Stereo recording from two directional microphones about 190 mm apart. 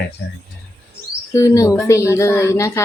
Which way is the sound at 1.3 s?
15° left (ahead or behind).